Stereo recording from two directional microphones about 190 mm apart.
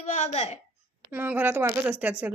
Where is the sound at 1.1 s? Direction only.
10° right (ahead or behind).